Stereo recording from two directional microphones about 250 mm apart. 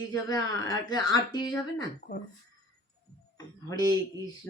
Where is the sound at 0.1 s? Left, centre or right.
Centre.